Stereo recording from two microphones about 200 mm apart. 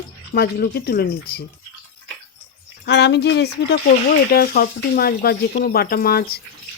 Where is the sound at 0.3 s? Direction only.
50° left (ahead or behind).